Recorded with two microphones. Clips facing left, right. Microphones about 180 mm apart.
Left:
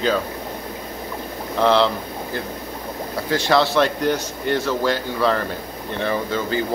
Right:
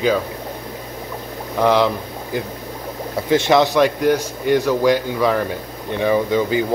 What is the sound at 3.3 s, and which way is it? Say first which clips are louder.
A man's voice: right 4 dB; 20° right (ahead or behind).